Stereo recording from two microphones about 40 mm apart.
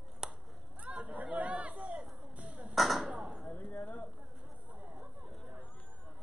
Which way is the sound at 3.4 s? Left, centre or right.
Left.